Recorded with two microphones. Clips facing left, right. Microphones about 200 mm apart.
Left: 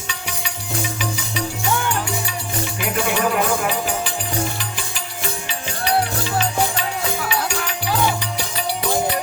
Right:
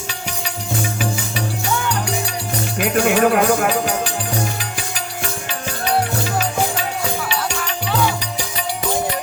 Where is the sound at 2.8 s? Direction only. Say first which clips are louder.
Right 6 dB; 60° right (ahead or behind).